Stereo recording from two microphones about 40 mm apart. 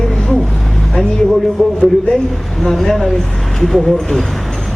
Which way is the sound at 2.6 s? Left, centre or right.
Centre.